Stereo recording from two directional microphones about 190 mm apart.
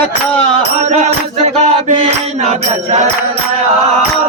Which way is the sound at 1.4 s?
35° right (ahead or behind).